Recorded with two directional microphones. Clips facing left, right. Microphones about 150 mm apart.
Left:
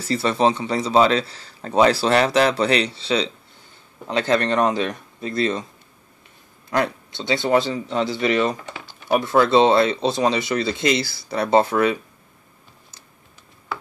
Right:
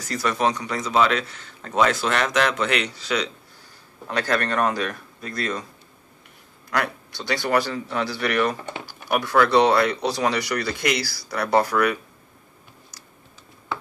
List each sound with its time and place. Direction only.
0.0 s a man's voice: 30° left (ahead or behind)
6.7 s speech: 20° left (ahead or behind)